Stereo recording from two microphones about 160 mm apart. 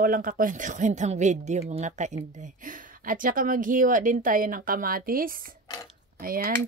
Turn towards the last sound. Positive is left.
turn(degrees=-65)  # may be behind; listen again after turning